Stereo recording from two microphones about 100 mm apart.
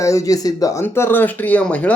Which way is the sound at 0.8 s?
20° left (ahead or behind).